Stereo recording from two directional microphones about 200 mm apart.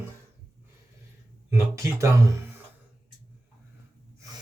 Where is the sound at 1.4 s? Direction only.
15° right (ahead or behind).